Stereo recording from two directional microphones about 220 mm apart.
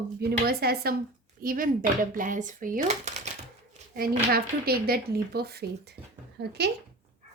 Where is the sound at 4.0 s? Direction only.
45° right (ahead or behind).